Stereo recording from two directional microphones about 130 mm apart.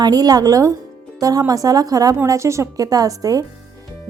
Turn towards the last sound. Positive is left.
turn(degrees=-25)  # may be behind; listen again after turning